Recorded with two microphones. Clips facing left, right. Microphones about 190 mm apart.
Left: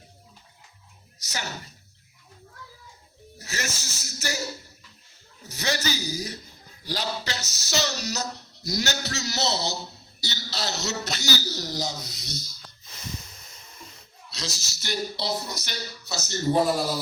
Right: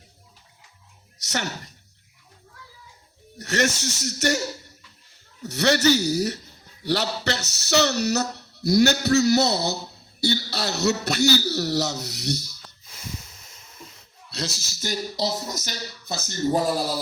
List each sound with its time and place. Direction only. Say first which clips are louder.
3.3 s speech: right 11 dB; 70° right (ahead or behind)
5.4 s a man's voice: right 9 dB; 75° right (ahead or behind)
14.3 s speech: right 5 dB; 60° right (ahead or behind)